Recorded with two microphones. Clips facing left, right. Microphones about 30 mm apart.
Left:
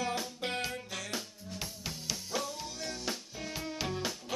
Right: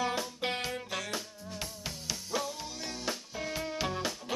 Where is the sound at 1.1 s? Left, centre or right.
Centre.